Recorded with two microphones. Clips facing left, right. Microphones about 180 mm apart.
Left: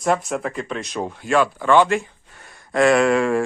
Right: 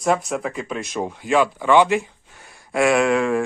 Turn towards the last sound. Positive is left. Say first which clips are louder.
# left 1 dB
turn(degrees=-5)  # may be behind; listen again after turning